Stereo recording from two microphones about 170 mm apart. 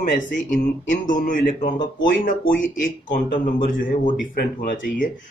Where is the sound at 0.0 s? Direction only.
50° left (ahead or behind).